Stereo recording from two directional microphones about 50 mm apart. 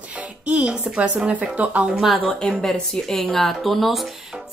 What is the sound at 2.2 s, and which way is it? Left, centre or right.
Speech, centre.